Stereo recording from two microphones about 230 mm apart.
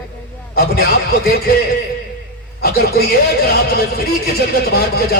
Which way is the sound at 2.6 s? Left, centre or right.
Left.